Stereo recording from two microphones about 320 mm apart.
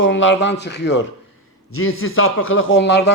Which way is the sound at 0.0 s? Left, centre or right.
Left.